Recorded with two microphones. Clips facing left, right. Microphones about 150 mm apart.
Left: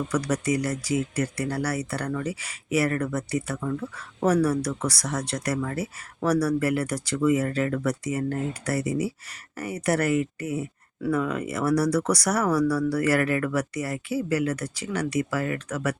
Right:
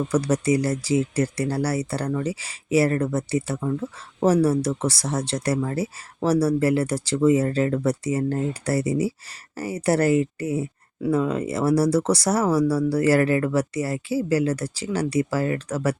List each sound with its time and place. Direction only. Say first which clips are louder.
0.1 s speech: right 5 dB; 30° right (ahead or behind)